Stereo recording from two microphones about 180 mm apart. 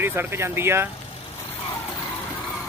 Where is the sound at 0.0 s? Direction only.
10° right (ahead or behind).